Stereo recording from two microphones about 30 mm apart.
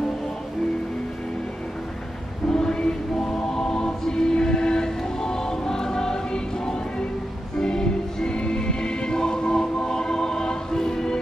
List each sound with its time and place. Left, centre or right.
2.5 s choir: left